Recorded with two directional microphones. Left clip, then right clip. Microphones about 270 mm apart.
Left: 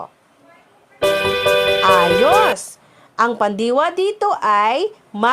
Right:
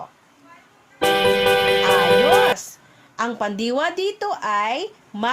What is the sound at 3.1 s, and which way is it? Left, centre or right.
Speech, left.